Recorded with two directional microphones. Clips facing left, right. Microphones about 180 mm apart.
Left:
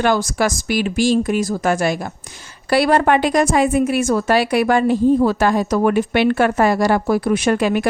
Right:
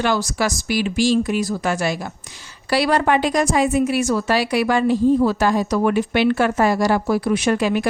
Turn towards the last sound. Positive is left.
turn(degrees=55)  # may be behind; listen again after turning